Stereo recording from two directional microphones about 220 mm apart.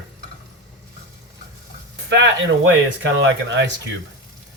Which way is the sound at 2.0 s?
55° right (ahead or behind).